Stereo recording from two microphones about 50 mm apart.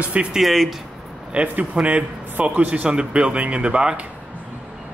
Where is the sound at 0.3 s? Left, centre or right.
Centre.